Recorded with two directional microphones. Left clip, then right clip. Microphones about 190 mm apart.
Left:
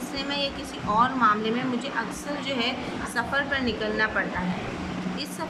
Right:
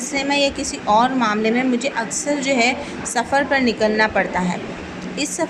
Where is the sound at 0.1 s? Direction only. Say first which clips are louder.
Right 11 dB; 20° right (ahead or behind).